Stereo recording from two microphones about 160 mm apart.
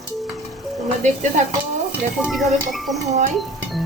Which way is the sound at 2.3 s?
Centre (ahead or behind).